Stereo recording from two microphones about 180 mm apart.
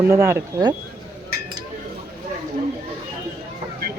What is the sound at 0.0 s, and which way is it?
Speech, 15° right (ahead or behind).